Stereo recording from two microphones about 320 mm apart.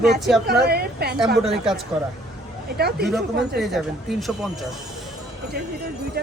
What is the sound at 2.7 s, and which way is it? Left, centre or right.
Speech, right.